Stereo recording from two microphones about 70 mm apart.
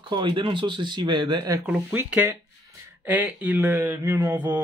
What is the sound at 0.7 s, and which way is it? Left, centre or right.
Speech, right.